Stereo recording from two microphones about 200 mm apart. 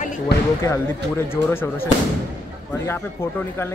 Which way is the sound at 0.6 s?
15° left (ahead or behind).